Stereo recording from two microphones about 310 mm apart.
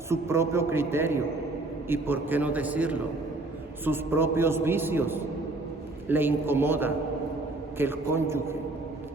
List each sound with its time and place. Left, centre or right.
0.1 s a man's voice: centre